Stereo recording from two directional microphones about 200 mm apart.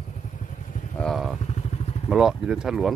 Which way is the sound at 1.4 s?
35° left (ahead or behind).